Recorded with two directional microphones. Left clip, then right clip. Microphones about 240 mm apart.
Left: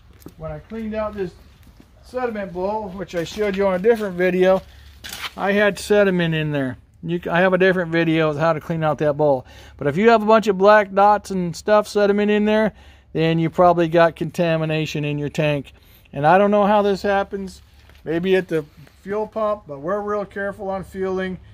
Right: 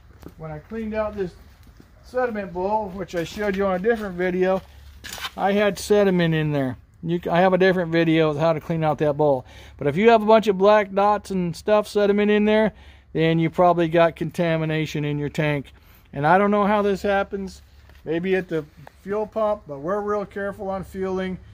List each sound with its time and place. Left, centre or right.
0.3 s a sound: left
2.3 s speech: left
5.3 s speech: centre
18.0 s speech: left
19.0 s speech: centre